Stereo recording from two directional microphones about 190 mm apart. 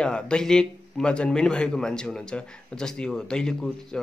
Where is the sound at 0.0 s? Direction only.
5° left (ahead or behind).